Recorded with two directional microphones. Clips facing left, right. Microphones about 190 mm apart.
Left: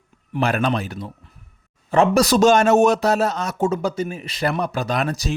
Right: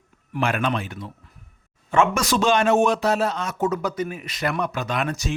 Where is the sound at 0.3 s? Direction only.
35° left (ahead or behind).